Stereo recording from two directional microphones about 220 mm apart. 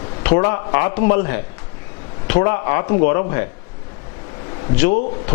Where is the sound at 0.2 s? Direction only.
15° left (ahead or behind).